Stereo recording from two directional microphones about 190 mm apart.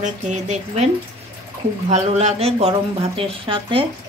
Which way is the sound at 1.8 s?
35° right (ahead or behind).